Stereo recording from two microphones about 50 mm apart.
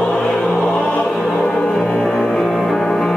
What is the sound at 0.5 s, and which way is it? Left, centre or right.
Choir, centre.